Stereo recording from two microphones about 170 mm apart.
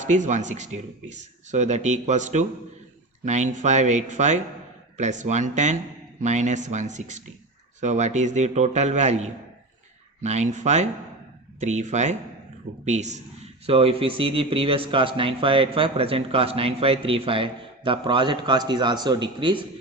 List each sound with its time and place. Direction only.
0.0 s speech: 45° right (ahead or behind); by 19.6 s 30° right (ahead or behind)